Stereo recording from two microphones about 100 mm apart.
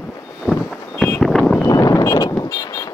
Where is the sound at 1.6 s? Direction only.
35° left (ahead or behind).